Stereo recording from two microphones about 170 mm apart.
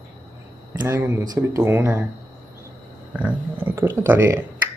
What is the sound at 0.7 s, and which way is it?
Speech, 15° right (ahead or behind).